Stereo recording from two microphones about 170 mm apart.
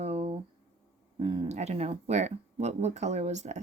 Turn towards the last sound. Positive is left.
turn(degrees=-40)  # may be behind; listen again after turning